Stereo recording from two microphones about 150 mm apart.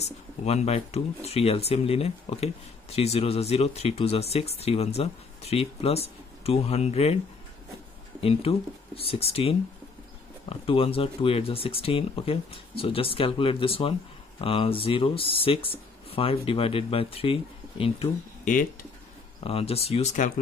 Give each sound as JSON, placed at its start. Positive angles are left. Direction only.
{"t": 0.5, "sound": "speech", "side_deg": 45}
{"t": 8.2, "sound": "speech", "side_deg": 40}
{"t": 18.5, "sound": "speech", "side_deg": 65}
{"t": 19.4, "sound": "speech", "side_deg": 40}